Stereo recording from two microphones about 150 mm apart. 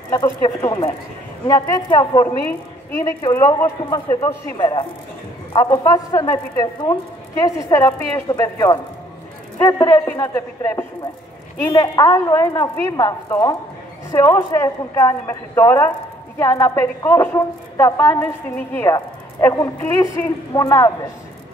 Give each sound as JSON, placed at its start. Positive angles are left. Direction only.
{"t": 0.1, "sound": "a woman's voice", "side_deg": 20}